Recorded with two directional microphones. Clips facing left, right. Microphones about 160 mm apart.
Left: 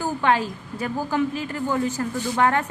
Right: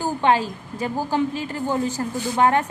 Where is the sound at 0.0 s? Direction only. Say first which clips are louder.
Right 2 dB; 25° right (ahead or behind).